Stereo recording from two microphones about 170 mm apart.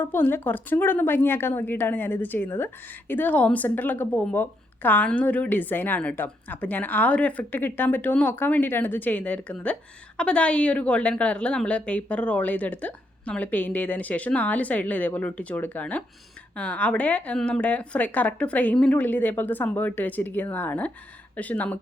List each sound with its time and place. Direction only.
0.0 s a woman's voice: 10° left (ahead or behind)